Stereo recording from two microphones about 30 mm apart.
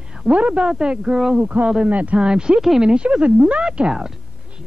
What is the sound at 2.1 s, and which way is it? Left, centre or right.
A man's voice, right.